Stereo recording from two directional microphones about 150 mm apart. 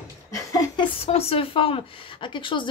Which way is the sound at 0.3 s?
25° left (ahead or behind).